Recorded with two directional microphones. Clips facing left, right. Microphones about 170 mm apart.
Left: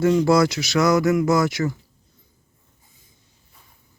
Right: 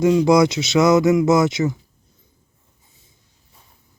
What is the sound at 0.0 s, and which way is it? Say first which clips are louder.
Speech: right 3 dB; 15° right (ahead or behind).